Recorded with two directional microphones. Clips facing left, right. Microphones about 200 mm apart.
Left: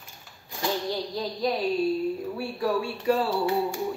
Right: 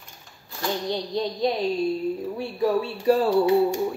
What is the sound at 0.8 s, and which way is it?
Speech, 25° right (ahead or behind).